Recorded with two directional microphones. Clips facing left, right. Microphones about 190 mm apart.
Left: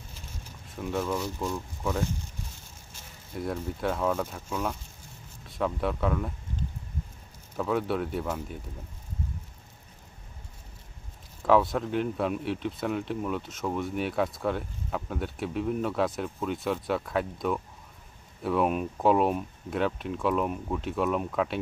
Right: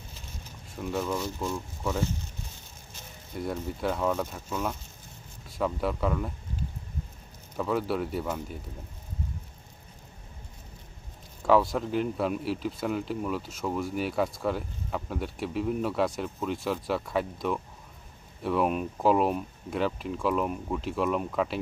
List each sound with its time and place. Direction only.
0.7 s speech: centre (ahead or behind)
3.3 s speech: centre (ahead or behind)
5.5 s speech: centre (ahead or behind)
7.5 s speech: centre (ahead or behind)
11.4 s speech: centre (ahead or behind)